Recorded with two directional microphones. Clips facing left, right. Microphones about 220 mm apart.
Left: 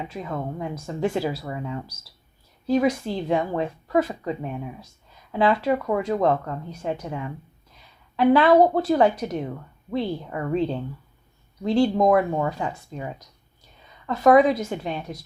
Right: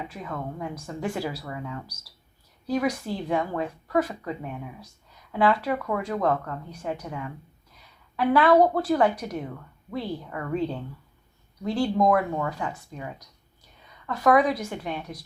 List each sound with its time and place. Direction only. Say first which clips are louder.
0.1 s speech: left 4 dB; 25° left (ahead or behind)
14.1 s speech: left 5 dB; 25° left (ahead or behind)